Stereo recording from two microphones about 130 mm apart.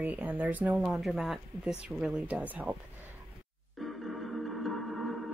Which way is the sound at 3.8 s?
Centre (ahead or behind).